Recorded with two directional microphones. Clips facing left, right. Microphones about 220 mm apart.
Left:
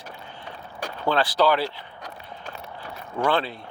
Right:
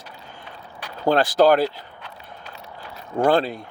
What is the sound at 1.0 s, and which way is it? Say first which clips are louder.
Speech: right 5 dB; 45° right (ahead or behind).